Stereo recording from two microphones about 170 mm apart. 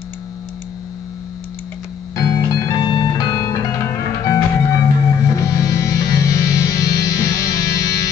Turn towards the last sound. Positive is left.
turn(degrees=20)  # may be behind; listen again after turning